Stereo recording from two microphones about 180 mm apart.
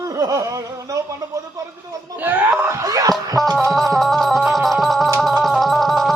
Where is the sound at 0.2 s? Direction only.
20° right (ahead or behind).